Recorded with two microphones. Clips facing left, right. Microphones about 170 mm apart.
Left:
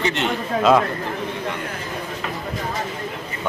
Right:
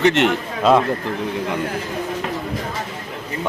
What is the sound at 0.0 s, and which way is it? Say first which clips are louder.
Speech: right 7 dB; 75° right (ahead or behind).